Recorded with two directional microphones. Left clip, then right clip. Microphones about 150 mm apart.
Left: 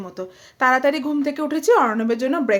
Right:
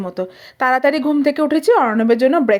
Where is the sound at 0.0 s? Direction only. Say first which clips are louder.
Right 8 dB; 35° right (ahead or behind).